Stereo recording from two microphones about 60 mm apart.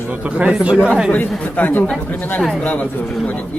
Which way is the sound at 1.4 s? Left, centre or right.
Left.